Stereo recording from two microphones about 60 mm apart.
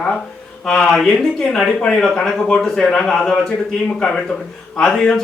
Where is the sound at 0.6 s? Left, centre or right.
Centre.